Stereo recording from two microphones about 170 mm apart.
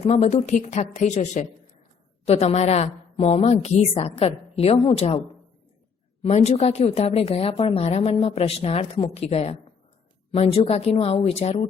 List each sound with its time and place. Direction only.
0.0 s a woman's voice: 40° left (ahead or behind)
6.2 s a woman's voice: 40° left (ahead or behind)